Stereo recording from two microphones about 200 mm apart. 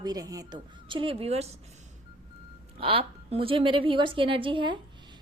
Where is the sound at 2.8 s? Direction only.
30° right (ahead or behind).